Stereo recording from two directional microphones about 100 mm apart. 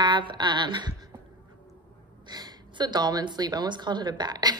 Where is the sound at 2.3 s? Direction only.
45° right (ahead or behind).